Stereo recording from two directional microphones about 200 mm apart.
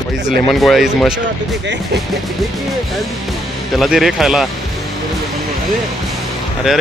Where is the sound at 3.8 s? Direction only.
Centre (ahead or behind).